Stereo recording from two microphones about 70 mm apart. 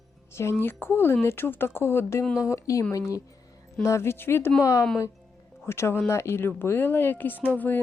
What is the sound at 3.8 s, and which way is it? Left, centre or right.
Speech, left.